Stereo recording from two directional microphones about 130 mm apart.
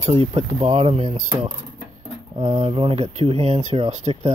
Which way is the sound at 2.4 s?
45° right (ahead or behind).